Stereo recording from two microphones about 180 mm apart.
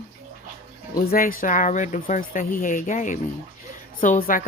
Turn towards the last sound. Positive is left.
turn(degrees=50)  # may be behind; listen again after turning